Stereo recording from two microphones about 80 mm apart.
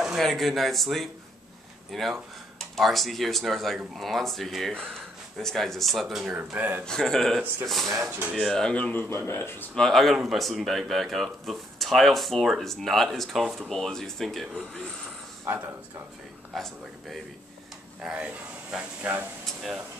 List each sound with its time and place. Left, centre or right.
0.0 s speech: centre
6.5 s a man's voice: right
6.9 s speech: centre; by 9.7 s left
9.8 s speech: centre
15.4 s speech: right
16.5 s speech: centre
18.0 s speech: centre
19.4 s speech: centre